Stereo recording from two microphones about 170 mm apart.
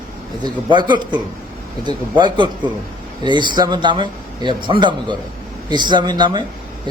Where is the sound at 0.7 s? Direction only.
25° right (ahead or behind).